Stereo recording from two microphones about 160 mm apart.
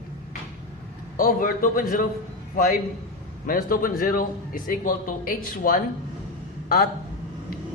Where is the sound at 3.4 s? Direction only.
60° left (ahead or behind).